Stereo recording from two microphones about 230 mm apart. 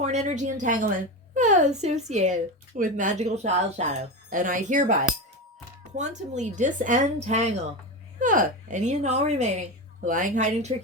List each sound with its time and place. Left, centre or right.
0.0 s speech: right
6.0 s speech: right